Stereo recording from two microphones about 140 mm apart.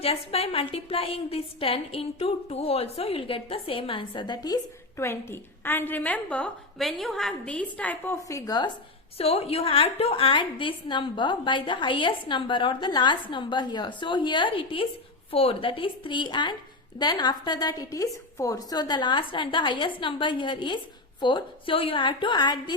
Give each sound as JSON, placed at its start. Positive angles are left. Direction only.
{"t": 0.0, "sound": "a woman's voice", "side_deg": 45}
{"t": 9.1, "sound": "a woman's voice", "side_deg": 45}